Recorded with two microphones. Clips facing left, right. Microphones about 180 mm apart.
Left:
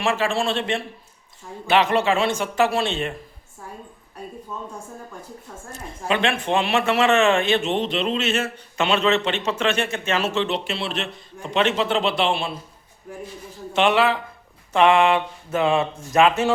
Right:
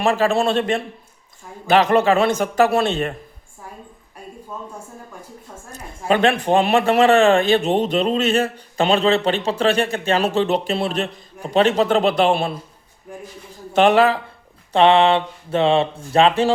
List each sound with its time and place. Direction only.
0.0 s a man's voice: 40° right (ahead or behind)
6.1 s a man's voice: 40° right (ahead or behind)
13.7 s a man's voice: 40° right (ahead or behind)